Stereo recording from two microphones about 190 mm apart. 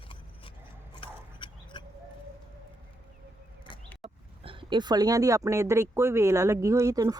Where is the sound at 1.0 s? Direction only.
25° left (ahead or behind).